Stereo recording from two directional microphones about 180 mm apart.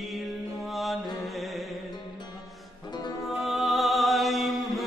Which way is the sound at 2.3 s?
Centre (ahead or behind).